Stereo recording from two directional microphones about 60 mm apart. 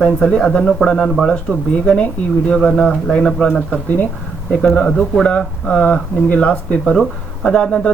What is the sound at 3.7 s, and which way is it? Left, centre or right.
Speech, left.